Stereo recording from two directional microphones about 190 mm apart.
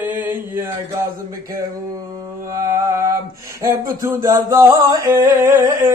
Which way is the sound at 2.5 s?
15° right (ahead or behind).